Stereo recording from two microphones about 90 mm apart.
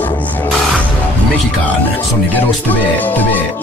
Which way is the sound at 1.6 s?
20° left (ahead or behind).